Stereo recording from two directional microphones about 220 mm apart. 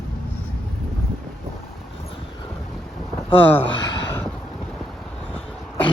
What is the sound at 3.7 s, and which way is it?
Gasp, 55° left (ahead or behind).